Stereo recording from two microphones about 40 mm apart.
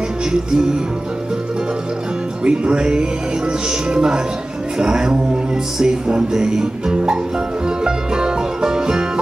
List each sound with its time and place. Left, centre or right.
2.4 s music: right